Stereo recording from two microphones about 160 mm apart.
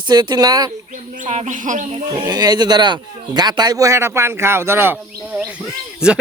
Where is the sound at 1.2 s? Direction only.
50° right (ahead or behind).